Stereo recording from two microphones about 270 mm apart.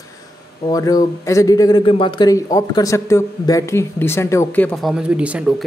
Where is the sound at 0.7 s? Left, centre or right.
Centre.